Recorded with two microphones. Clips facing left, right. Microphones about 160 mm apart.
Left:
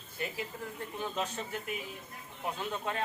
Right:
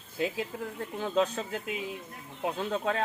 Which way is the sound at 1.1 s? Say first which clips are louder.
Right 8 dB; 90° right.